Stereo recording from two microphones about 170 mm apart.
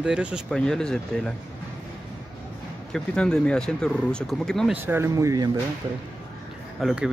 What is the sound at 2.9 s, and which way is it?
Speech, 5° left (ahead or behind).